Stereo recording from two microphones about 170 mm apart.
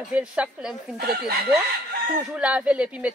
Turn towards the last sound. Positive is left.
turn(degrees=-5)  # may be behind; listen again after turning